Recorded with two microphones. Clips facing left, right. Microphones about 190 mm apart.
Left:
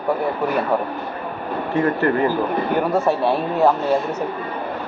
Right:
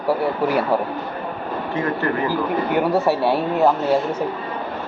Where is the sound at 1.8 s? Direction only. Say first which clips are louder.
Left 4 dB; 40° left (ahead or behind).